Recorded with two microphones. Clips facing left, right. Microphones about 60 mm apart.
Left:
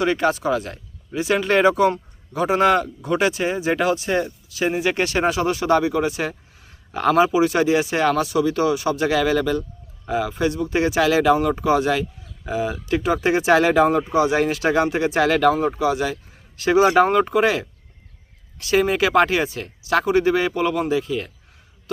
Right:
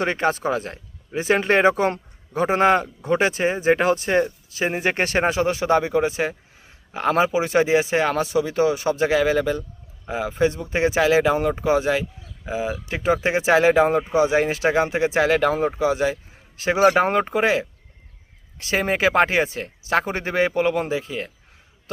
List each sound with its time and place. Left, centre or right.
0.0 s speech: right